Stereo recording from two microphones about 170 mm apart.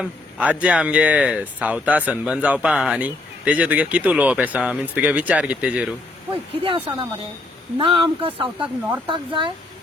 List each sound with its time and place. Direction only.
0.0 s speech: 10° right (ahead or behind)
6.3 s speech: 30° right (ahead or behind)